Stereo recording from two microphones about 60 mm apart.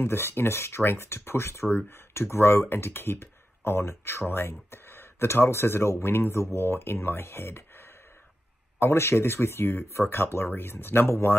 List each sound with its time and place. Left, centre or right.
0.0 s speech: left